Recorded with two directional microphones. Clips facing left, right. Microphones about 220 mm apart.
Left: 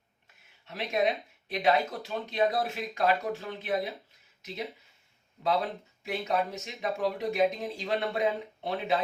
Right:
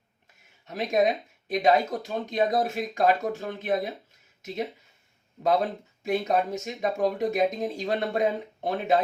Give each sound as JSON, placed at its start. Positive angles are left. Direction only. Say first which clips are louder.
{"t": 0.7, "sound": "speech", "louder": "right 5 dB", "side_deg": -45}